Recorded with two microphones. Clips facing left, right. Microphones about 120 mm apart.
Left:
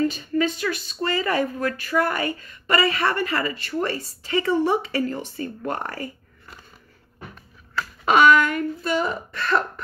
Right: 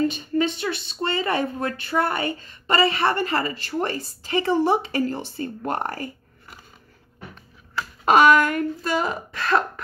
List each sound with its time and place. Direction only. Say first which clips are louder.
0.0 s speech: even; 25° right (ahead or behind)
8.0 s speech: right 1 dB; 45° right (ahead or behind)
9.0 s speech: even; 90° right